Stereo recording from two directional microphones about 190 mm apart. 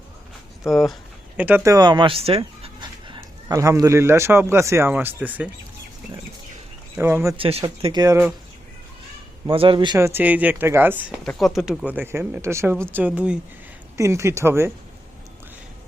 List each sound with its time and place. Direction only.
0.7 s speech: centre (ahead or behind)
6.9 s speech: 10° right (ahead or behind)
7.3 s speech: 30° right (ahead or behind)
8.0 s speech: 15° right (ahead or behind)
9.5 s speech: 25° right (ahead or behind); by 11.0 s 10° right (ahead or behind)
11.2 s speech: centre (ahead or behind)